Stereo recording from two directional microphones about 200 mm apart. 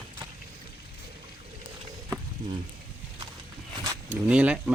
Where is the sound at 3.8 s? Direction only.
5° right (ahead or behind).